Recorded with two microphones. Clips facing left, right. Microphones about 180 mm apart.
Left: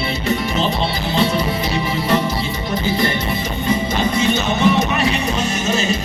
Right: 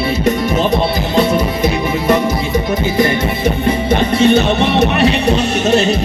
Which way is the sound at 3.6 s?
60° right (ahead or behind).